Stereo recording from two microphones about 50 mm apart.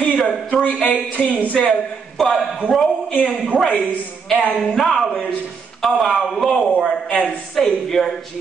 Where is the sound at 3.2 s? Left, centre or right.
Centre.